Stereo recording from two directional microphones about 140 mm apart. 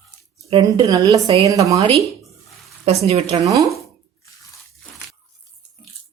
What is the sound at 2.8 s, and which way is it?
Speech, 50° right (ahead or behind).